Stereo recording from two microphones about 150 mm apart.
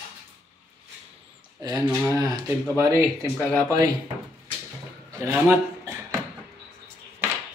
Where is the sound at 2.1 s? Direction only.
25° right (ahead or behind).